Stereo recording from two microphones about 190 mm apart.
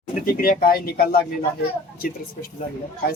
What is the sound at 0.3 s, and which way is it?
Speech, 50° left (ahead or behind).